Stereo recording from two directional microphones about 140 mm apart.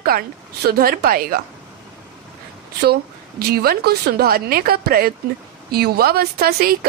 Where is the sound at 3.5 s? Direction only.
90° right.